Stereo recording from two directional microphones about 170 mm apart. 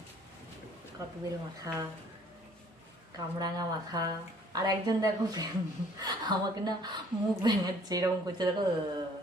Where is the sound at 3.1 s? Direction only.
20° right (ahead or behind).